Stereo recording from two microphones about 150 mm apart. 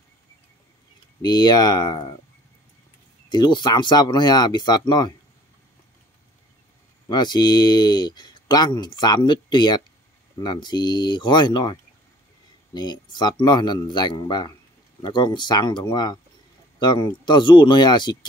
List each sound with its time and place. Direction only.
1.2 s speech: 30° left (ahead or behind)
3.3 s speech: 30° left (ahead or behind)
7.1 s speech: 30° left (ahead or behind)